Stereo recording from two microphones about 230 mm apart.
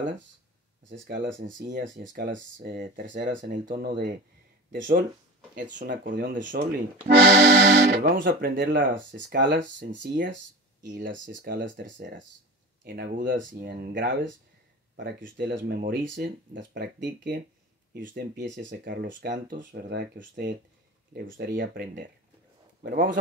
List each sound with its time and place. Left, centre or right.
0.8 s speech: right
3.3 s speech: right
7.1 s speech: right
8.9 s speech: right
10.9 s speech: right
11.8 s speech: right
18.7 s a man's voice: right